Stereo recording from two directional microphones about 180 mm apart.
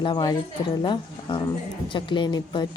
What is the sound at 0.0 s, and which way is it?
Speech, 25° left (ahead or behind).